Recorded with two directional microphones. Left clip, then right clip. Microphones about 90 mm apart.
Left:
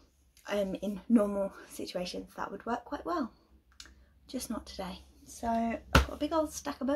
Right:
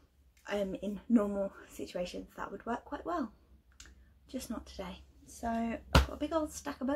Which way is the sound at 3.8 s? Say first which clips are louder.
Left 4 dB; 30° left (ahead or behind).